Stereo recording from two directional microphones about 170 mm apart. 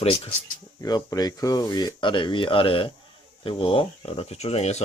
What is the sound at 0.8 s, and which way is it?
Speech, 20° left (ahead or behind).